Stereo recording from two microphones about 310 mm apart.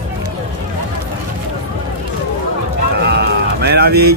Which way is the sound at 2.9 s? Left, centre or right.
Right.